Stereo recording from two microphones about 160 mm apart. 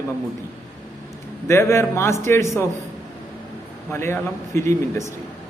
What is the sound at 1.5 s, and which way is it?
A man's voice, 15° left (ahead or behind).